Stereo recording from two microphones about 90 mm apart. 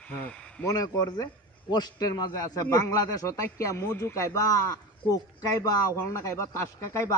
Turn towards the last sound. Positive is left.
turn(degrees=35)  # may be behind; listen again after turning